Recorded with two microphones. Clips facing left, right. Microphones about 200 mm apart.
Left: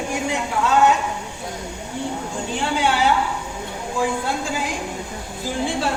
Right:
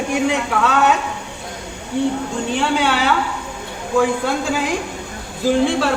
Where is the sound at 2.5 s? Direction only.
75° right (ahead or behind).